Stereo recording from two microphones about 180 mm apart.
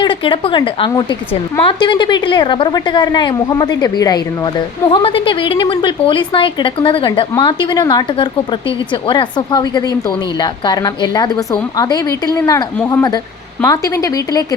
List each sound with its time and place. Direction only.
0.0 s a woman's voice: 25° left (ahead or behind)